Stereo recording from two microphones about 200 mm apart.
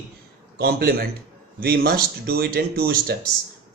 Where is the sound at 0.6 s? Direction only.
50° right (ahead or behind).